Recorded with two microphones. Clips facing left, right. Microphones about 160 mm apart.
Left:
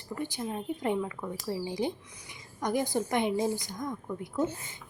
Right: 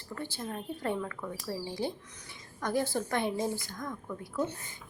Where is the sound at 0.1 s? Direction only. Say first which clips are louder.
Left 4 dB; 15° left (ahead or behind).